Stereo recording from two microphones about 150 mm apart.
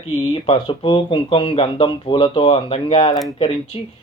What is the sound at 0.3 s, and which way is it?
Speech, 40° left (ahead or behind).